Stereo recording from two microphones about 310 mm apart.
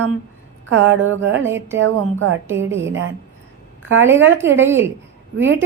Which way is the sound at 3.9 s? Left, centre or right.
Right.